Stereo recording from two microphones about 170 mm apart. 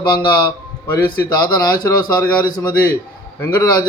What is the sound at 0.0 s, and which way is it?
A man's voice, 25° left (ahead or behind).